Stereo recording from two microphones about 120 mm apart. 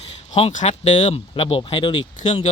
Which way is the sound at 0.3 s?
70° left (ahead or behind).